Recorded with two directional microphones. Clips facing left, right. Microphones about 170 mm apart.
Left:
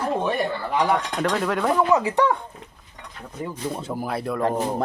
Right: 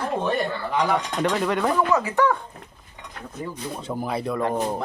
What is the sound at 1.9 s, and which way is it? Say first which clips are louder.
Speech: left 1 dB; 25° left (ahead or behind).